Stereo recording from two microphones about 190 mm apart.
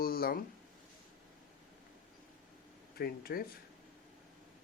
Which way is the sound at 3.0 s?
50° left (ahead or behind).